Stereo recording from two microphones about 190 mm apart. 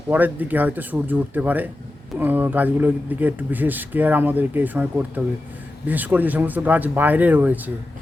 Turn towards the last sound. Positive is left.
turn(degrees=-10)  # may be behind; listen again after turning